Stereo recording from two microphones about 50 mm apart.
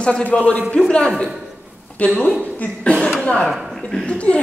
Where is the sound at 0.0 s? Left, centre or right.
Left.